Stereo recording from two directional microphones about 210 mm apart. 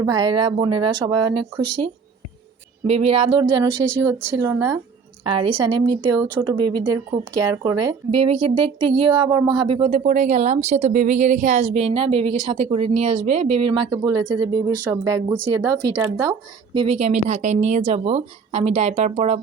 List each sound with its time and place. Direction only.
0.0 s a woman's voice: 20° right (ahead or behind)
13.9 s speech: 15° right (ahead or behind)
16.7 s speech: 25° right (ahead or behind)